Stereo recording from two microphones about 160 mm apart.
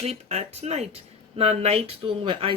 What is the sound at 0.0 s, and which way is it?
Speech, 40° right (ahead or behind).